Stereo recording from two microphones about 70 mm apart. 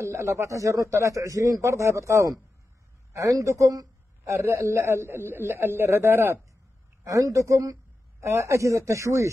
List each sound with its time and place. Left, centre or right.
0.0 s a man's voice: right
7.1 s a man's voice: right